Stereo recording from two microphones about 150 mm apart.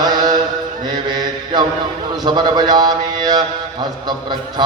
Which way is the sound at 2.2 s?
30° right (ahead or behind).